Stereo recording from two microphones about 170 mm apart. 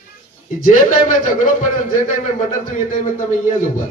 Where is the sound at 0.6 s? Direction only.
55° left (ahead or behind).